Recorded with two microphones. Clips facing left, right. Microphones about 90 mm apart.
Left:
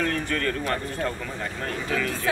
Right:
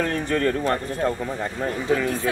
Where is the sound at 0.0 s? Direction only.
30° right (ahead or behind).